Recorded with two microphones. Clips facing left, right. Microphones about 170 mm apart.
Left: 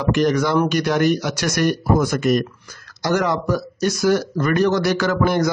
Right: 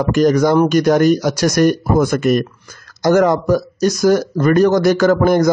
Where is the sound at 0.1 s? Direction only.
40° right (ahead or behind).